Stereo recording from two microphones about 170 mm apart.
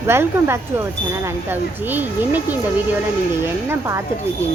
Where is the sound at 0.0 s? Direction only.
15° right (ahead or behind).